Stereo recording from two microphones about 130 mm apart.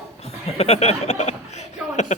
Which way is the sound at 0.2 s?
55° left (ahead or behind).